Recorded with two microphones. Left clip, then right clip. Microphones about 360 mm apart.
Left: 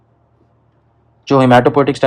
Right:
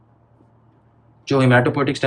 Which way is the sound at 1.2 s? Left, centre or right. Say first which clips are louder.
Left 7 dB; centre.